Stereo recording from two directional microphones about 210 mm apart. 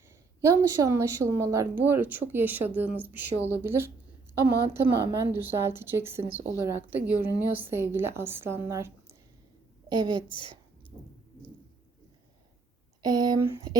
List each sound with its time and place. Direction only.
0.4 s speech: 15° right (ahead or behind)
9.9 s speech: 20° right (ahead or behind)
13.0 s speech: 20° right (ahead or behind)